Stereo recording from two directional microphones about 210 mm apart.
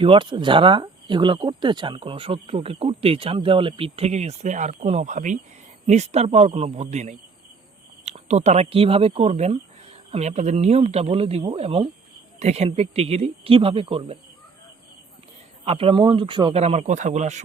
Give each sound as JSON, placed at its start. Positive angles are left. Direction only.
{"t": 0.0, "sound": "a man's voice", "side_deg": -25}
{"t": 15.6, "sound": "speech", "side_deg": -25}